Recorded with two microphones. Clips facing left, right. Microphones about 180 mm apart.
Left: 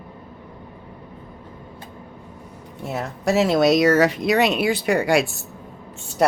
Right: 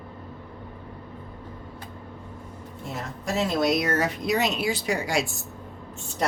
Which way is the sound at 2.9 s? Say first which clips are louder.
Left 9 dB; 75° left (ahead or behind).